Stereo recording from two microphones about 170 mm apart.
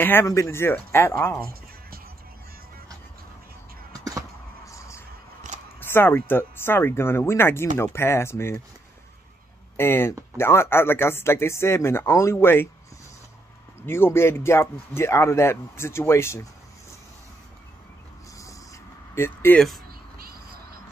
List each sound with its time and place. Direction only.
0.0 s a man's voice: 15° left (ahead or behind)
4.6 s music: 20° left (ahead or behind)
5.8 s a man's voice: 15° left (ahead or behind)
9.8 s a man's voice: 15° left (ahead or behind)
13.8 s a man's voice: 15° left (ahead or behind)
19.1 s a man's voice: 15° left (ahead or behind)
20.2 s a sound: 60° right (ahead or behind)